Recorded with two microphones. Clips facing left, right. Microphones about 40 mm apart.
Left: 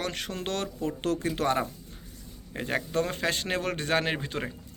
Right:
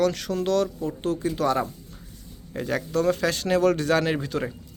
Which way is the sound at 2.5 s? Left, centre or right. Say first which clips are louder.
Right 3 dB; left.